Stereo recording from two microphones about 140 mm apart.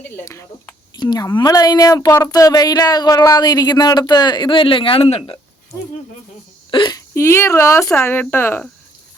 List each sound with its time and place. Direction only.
0.9 s speech: 30° left (ahead or behind)
6.7 s speech: 35° left (ahead or behind)
7.1 s speech: 20° left (ahead or behind)